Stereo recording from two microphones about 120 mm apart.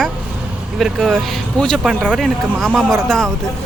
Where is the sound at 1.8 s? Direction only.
5° right (ahead or behind).